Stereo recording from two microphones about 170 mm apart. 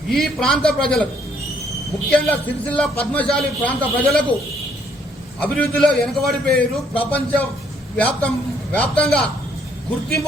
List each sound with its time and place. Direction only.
0.1 s a man's voice: centre (ahead or behind)
2.0 s a man's voice: 10° left (ahead or behind)
5.4 s a man's voice: 5° left (ahead or behind)